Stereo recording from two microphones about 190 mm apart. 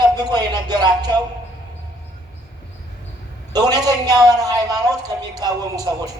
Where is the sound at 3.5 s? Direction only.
20° right (ahead or behind).